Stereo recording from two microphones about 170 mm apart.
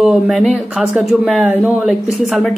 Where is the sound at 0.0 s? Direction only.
Centre (ahead or behind).